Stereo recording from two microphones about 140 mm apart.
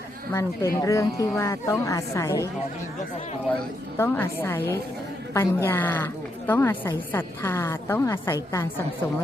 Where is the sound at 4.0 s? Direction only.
15° left (ahead or behind).